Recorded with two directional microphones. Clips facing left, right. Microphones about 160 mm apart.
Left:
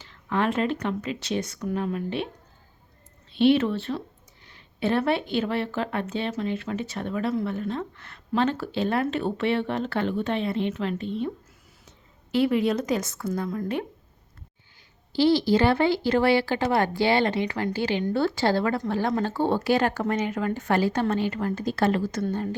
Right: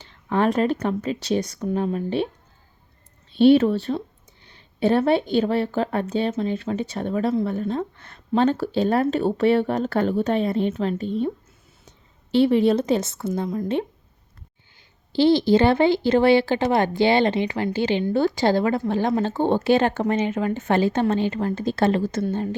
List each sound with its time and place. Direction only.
0.0 s speech: 30° right (ahead or behind)
3.4 s speech: 35° right (ahead or behind)
4.4 s a sound: 30° right (ahead or behind)
5.3 s speech: 30° right (ahead or behind)
12.3 s speech: 30° right (ahead or behind)
15.1 s speech: 25° right (ahead or behind)